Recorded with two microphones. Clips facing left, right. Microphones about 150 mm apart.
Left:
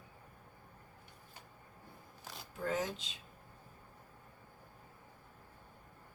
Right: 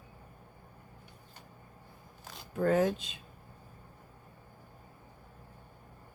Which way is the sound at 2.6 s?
55° right (ahead or behind).